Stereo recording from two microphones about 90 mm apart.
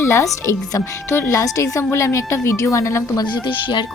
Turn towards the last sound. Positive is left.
turn(degrees=60)  # may be behind; listen again after turning